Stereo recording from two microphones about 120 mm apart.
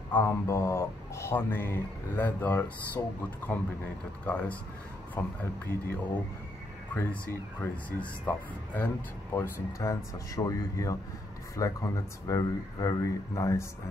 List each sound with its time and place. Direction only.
0.1 s speech: 20° left (ahead or behind)
4.3 s speech: 10° left (ahead or behind)